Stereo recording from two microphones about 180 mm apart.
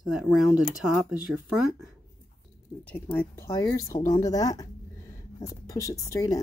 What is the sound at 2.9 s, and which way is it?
Speech, 10° left (ahead or behind).